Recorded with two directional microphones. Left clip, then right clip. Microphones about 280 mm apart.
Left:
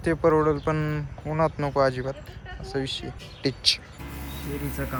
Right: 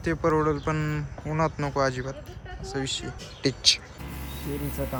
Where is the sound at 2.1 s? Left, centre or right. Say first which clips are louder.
Even; right.